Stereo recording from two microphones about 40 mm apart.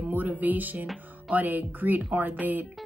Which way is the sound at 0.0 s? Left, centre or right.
Right.